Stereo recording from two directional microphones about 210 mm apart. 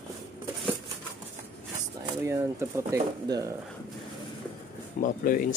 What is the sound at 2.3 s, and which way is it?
Speech, 15° right (ahead or behind).